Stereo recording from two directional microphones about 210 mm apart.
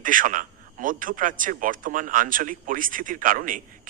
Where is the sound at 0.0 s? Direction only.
40° right (ahead or behind).